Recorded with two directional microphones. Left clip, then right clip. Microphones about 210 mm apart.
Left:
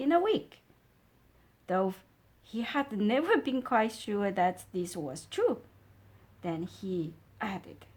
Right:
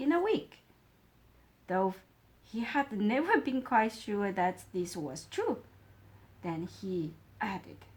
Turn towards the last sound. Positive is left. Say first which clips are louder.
# right 1 dB
turn(degrees=40)  # may be behind; listen again after turning